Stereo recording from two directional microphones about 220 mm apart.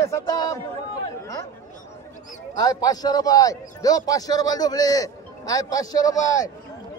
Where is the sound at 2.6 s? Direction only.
15° left (ahead or behind).